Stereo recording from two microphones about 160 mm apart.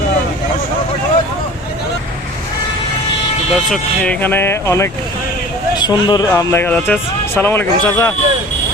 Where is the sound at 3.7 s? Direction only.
5° left (ahead or behind); by 6.4 s 25° left (ahead or behind).